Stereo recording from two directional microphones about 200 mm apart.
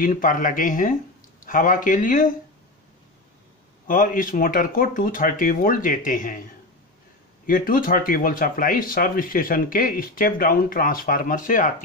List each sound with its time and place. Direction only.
0.0 s speech: 40° left (ahead or behind)
3.8 s speech: 40° left (ahead or behind)
7.4 s speech: 45° left (ahead or behind)